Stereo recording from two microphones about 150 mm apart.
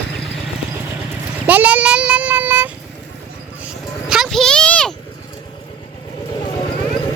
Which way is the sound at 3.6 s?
5° right (ahead or behind).